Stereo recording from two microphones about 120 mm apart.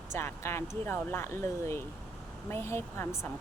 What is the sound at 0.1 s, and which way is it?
Speech, 20° left (ahead or behind).